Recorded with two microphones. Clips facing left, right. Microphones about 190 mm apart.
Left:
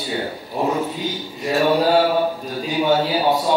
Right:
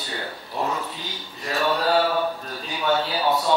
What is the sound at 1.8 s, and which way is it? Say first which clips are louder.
Speech: left 5 dB; 10° left (ahead or behind).